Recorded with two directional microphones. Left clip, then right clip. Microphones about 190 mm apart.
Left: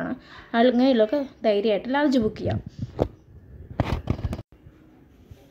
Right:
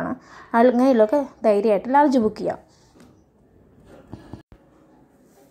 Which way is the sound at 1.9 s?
10° right (ahead or behind).